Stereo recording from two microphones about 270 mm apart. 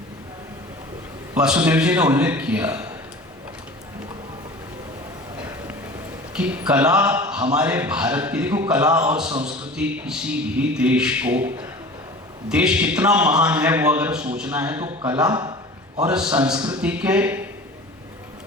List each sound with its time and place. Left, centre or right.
1.3 s a man's voice: centre
5.4 s a sound: centre
6.3 s a man's voice: centre